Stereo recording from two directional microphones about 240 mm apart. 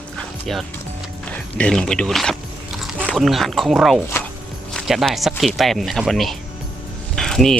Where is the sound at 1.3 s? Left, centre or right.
Centre.